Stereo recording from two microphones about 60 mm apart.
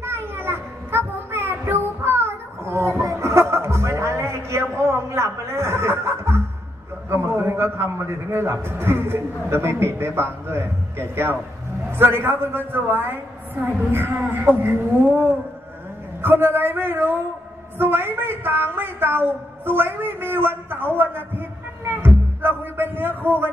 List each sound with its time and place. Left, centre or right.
0.0 s child singing: right
7.1 s a man's voice: right
16.2 s a man's voice: right